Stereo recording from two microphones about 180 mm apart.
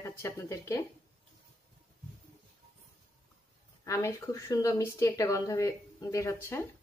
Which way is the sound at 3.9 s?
15° left (ahead or behind).